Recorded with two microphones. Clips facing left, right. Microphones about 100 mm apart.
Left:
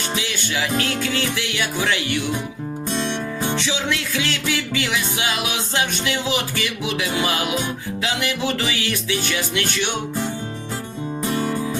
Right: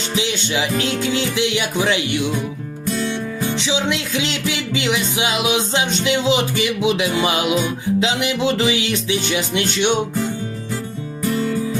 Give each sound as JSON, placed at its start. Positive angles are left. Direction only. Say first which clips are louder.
{"t": 0.2, "sound": "music", "louder": "right 8 dB", "side_deg": -20}
{"t": 2.8, "sound": "music", "louder": "right 3 dB", "side_deg": 25}
{"t": 3.6, "sound": "music", "louder": "right 3 dB", "side_deg": -15}
{"t": 11.2, "sound": "music", "louder": "right 3 dB", "side_deg": 20}